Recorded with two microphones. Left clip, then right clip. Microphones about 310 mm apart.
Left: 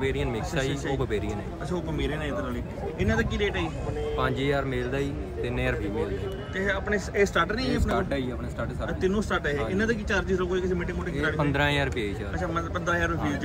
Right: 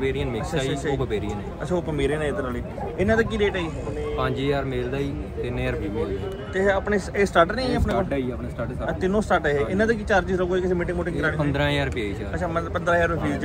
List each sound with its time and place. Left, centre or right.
0.0 s a man's voice: centre
7.9 s speech: left
8.8 s a man's voice: centre